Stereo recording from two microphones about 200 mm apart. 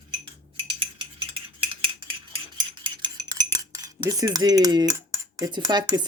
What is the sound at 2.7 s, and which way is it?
Cutlery, 25° right (ahead or behind).